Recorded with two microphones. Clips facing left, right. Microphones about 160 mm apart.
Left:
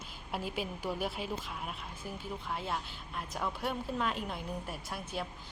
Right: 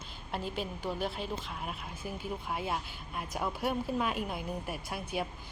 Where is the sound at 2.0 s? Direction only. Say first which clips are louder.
Right 3 dB; 10° right (ahead or behind).